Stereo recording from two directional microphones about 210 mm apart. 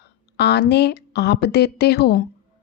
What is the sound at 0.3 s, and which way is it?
Speech, 55° left (ahead or behind).